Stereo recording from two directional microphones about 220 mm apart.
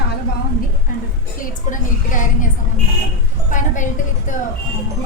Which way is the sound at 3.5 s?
35° left (ahead or behind).